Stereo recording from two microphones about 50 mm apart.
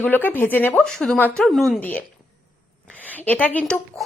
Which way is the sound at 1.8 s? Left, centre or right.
Left.